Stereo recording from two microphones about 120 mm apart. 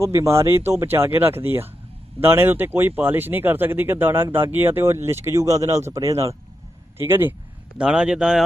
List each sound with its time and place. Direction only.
0.0 s speech: 25° right (ahead or behind); by 8.4 s 5° right (ahead or behind)